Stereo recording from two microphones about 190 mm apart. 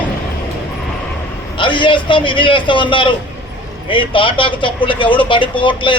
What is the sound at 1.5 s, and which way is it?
Speech, 25° left (ahead or behind).